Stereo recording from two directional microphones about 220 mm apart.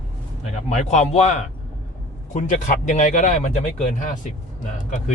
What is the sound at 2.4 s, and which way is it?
A man's voice, 35° left (ahead or behind).